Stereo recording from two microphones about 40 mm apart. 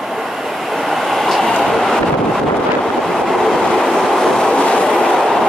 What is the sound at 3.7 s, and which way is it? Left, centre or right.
Vehicle, centre.